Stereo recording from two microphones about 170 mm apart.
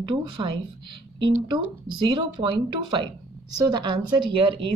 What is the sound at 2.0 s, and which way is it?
Speech, 25° right (ahead or behind).